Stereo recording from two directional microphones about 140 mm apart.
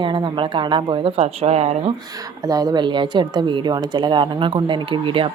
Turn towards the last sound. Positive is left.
turn(degrees=-35)  # may be behind; listen again after turning